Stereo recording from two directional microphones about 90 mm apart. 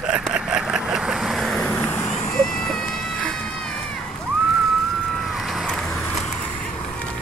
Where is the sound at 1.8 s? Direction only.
20° left (ahead or behind).